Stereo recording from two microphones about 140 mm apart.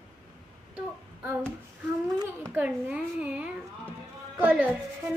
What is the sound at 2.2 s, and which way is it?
A child's voice, 15° right (ahead or behind).